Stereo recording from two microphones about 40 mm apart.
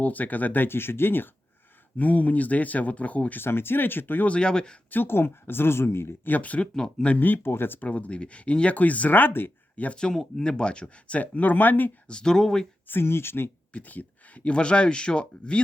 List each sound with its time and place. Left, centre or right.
0.0 s speech: left
0.7 s speech: left
2.0 s speech: left
3.3 s speech: left
4.3 s speech: left
4.9 s speech: left
6.2 s speech: left
7.4 s speech: left
7.8 s speech: left
9.9 s speech: left
12.0 s speech: centre
12.9 s speech: left
13.7 s speech: left
14.4 s speech: left